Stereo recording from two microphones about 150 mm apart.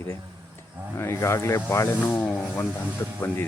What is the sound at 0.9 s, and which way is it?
Speech, 20° left (ahead or behind).